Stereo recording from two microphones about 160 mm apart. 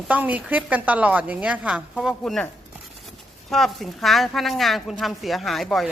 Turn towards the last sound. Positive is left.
turn(degrees=0)  # may be behind; listen again after turning